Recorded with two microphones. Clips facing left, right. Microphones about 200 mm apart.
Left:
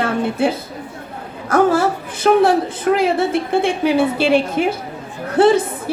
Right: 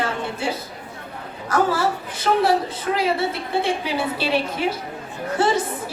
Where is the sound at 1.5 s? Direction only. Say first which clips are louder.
Left 6 dB; 50° left (ahead or behind).